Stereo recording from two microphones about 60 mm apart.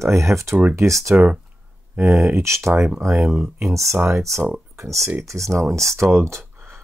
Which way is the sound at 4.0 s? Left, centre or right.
Right.